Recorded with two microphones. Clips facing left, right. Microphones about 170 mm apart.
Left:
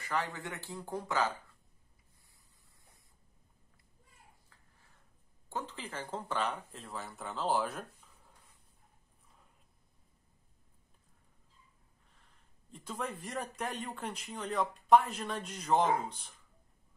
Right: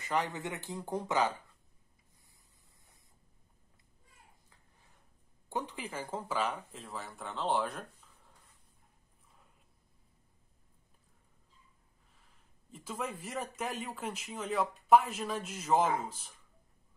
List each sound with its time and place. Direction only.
0.0 s speech: 20° right (ahead or behind)
5.5 s speech: 15° right (ahead or behind); by 7.8 s centre (ahead or behind)
12.7 s speech: centre (ahead or behind)